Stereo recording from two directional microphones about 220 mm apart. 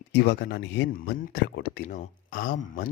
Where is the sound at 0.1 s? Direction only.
50° left (ahead or behind).